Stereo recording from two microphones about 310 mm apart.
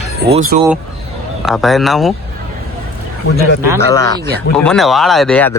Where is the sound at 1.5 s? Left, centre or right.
Centre.